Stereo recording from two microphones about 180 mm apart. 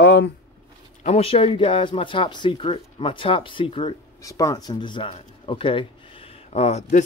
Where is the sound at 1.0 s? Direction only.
35° left (ahead or behind).